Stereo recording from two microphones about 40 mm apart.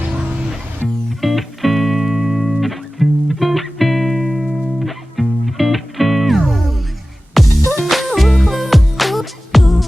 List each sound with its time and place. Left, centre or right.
1.2 s music: centre